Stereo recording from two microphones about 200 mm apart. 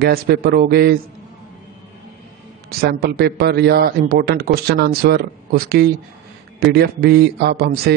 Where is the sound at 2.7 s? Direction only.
50° right (ahead or behind).